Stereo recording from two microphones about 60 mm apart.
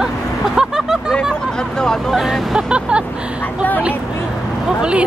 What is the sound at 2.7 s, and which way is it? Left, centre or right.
Speech, centre.